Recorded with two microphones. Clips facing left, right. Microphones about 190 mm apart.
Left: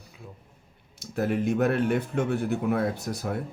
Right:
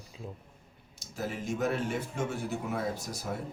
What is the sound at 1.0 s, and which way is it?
Speech, 60° left (ahead or behind).